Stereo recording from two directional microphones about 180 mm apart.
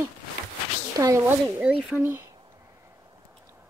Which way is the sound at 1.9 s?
15° right (ahead or behind).